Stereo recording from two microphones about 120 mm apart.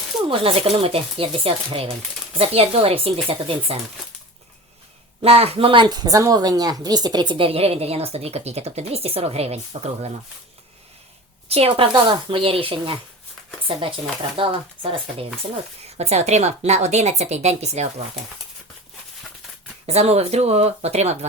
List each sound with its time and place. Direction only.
0.3 s a woman's voice: 50° right (ahead or behind)
5.2 s a woman's voice: 55° right (ahead or behind)
11.4 s a woman's voice: 55° right (ahead or behind)
11.9 s speech: 40° right (ahead or behind)
15.9 s a woman's voice: 65° right (ahead or behind)
19.9 s a woman's voice: 60° right (ahead or behind)